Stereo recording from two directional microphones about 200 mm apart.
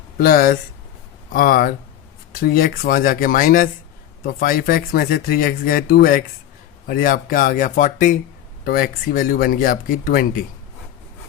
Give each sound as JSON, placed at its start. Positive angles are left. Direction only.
{"t": 0.2, "sound": "speech", "side_deg": 50}